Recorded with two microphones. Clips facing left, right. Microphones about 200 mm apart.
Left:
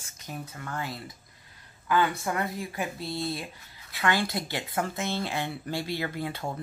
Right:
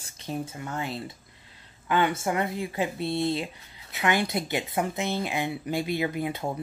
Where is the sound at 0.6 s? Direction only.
20° right (ahead or behind).